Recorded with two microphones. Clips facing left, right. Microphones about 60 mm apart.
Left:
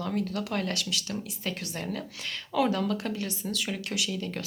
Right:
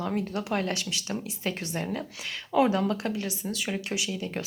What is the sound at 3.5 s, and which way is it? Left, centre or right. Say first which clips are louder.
Speech: right 1 dB; centre.